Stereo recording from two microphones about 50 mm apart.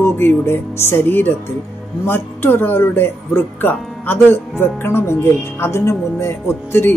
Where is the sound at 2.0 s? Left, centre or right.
Left.